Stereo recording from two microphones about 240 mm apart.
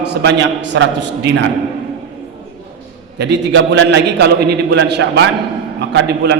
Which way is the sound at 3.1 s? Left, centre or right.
Right.